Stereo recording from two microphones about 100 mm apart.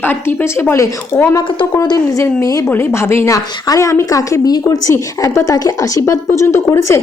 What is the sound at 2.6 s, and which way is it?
Speech, 25° left (ahead or behind).